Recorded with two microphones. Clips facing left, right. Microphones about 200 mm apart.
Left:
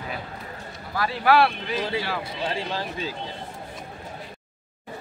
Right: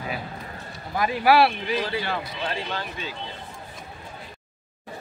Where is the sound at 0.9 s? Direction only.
15° right (ahead or behind).